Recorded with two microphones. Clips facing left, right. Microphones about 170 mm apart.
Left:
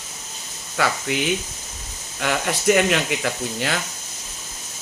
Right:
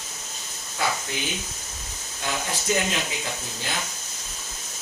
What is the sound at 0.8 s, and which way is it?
Speech, 80° left.